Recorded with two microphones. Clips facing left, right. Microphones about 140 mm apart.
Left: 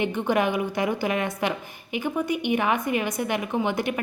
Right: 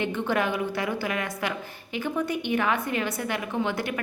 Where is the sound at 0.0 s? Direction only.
15° left (ahead or behind).